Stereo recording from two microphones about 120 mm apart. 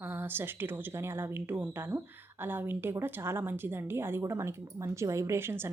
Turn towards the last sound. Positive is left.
turn(degrees=-20)  # may be behind; listen again after turning